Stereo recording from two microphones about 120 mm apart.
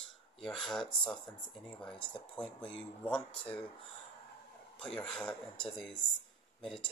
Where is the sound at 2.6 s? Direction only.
50° left (ahead or behind).